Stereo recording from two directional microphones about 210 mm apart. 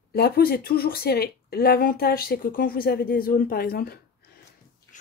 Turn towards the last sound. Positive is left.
turn(degrees=45)  # may be behind; listen again after turning